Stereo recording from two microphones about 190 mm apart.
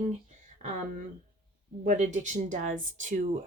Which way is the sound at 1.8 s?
40° right (ahead or behind).